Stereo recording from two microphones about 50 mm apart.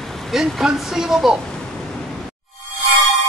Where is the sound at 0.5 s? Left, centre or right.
Centre.